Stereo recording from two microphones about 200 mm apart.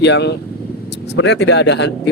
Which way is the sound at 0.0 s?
60° left (ahead or behind).